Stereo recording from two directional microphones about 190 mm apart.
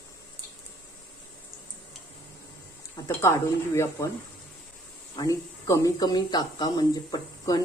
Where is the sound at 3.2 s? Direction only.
15° left (ahead or behind).